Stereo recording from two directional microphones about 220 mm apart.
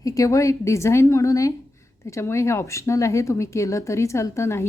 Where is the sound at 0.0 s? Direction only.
15° left (ahead or behind).